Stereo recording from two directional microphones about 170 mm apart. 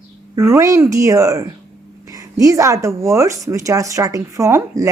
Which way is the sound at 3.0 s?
15° right (ahead or behind).